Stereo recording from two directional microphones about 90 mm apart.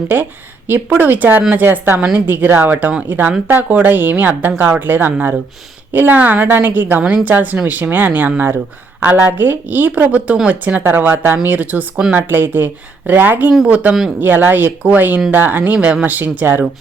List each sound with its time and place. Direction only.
0.7 s speech: 20° right (ahead or behind)